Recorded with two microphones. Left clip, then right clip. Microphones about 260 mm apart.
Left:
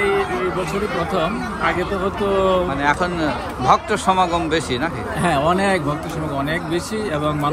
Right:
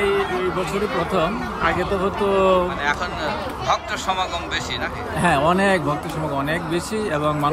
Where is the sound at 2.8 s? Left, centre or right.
Centre.